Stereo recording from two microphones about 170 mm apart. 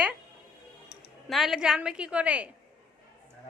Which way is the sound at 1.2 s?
Centre (ahead or behind).